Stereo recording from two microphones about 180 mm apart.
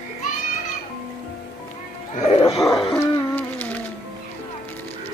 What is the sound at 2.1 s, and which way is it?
Music, 35° left (ahead or behind).